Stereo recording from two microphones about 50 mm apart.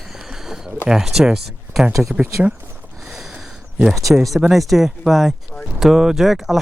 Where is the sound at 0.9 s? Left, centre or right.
Centre.